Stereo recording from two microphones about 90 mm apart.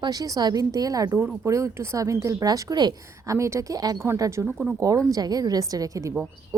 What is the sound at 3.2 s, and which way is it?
Speech, 35° right (ahead or behind).